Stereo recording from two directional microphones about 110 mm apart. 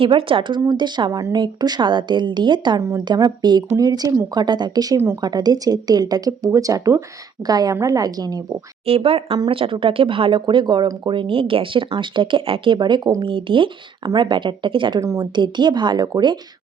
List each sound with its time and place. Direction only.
0.0 s speech: 55° right (ahead or behind); by 8.4 s 35° right (ahead or behind)
8.9 s speech: 55° right (ahead or behind)
14.0 s speech: 40° right (ahead or behind)